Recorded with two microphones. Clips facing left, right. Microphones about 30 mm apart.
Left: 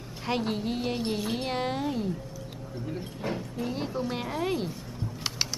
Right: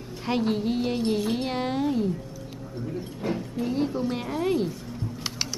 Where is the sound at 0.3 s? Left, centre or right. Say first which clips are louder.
Right 4 dB; centre.